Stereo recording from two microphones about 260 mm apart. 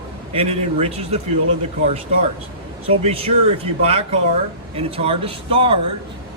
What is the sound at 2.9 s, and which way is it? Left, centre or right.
A man's voice, right.